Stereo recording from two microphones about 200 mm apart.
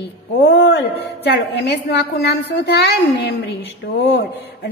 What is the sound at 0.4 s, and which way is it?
A woman's voice, 60° left (ahead or behind).